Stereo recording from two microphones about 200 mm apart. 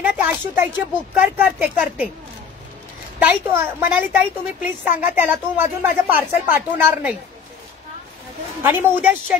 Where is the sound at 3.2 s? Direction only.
10° right (ahead or behind).